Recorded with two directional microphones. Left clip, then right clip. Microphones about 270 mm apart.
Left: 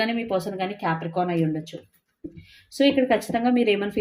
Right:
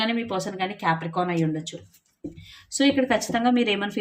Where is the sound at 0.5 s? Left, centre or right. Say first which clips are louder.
Right 1 dB; centre.